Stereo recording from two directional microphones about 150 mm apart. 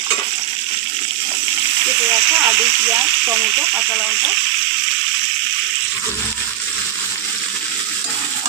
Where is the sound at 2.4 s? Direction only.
15° right (ahead or behind).